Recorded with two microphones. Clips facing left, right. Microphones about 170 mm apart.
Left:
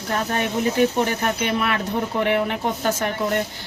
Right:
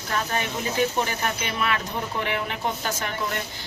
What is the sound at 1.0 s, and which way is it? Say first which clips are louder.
Speech: left 5 dB; 55° left (ahead or behind).